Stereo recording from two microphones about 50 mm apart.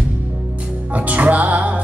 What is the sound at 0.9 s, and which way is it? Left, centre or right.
Music, right.